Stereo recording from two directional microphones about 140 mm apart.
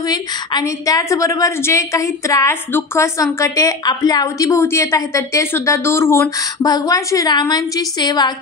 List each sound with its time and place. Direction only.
0.1 s a woman's voice: 30° left (ahead or behind)